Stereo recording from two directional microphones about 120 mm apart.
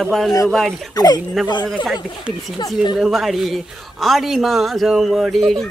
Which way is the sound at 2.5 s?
40° left (ahead or behind).